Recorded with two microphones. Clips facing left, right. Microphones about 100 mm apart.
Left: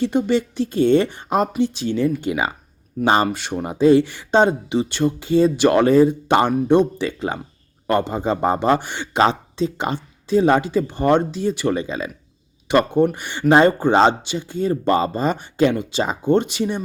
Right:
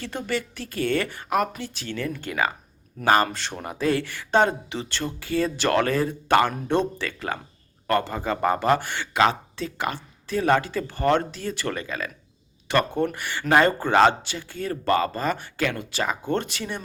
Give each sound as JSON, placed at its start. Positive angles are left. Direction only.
{"t": 0.0, "sound": "speech", "side_deg": 20}